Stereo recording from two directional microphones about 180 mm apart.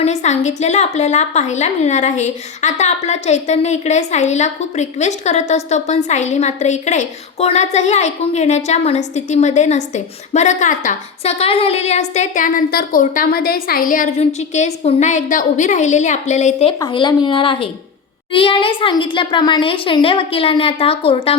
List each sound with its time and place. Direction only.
0.0 s a woman's voice: 40° left (ahead or behind)
16.8 s speech: 25° left (ahead or behind)